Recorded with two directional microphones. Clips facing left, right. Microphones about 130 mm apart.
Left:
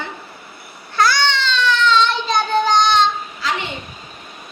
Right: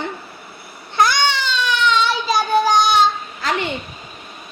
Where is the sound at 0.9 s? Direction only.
20° right (ahead or behind).